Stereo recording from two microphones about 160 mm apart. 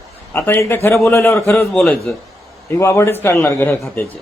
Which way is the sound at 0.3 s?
15° left (ahead or behind).